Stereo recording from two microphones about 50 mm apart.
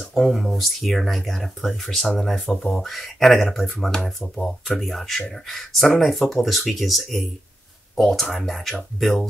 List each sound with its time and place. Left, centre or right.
0.0 s speech: centre
4.2 s speech: centre
4.7 s speech: centre